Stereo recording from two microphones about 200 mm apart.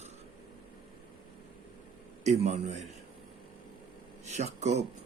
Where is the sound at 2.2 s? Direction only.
35° right (ahead or behind).